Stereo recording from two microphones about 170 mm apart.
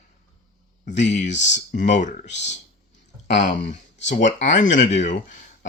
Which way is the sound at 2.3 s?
90° left.